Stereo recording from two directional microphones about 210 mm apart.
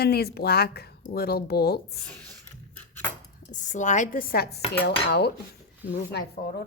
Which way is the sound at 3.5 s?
35° left (ahead or behind).